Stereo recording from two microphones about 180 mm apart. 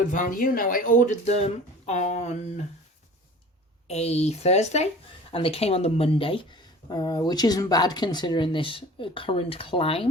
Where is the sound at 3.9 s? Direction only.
35° left (ahead or behind).